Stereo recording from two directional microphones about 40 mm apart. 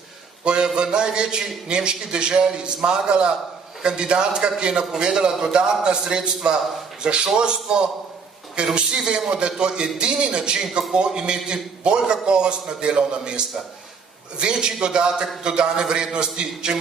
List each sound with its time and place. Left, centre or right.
0.5 s a man's voice: right